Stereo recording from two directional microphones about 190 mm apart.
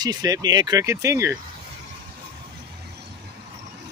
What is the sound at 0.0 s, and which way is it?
Speech, 20° right (ahead or behind).